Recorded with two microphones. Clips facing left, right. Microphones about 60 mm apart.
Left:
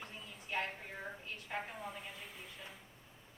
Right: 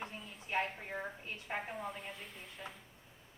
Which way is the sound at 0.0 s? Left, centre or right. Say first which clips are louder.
Right 4 dB; right.